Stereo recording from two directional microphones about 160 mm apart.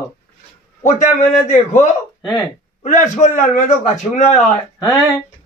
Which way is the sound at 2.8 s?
50° left (ahead or behind).